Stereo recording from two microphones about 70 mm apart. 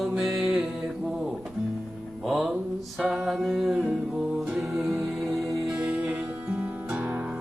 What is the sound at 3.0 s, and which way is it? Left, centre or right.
Mantra, centre.